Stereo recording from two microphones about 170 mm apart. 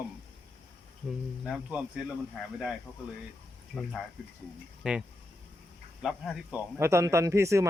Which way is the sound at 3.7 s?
5° left (ahead or behind).